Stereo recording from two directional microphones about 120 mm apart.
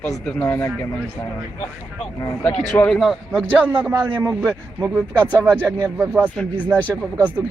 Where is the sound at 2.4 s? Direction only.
10° left (ahead or behind).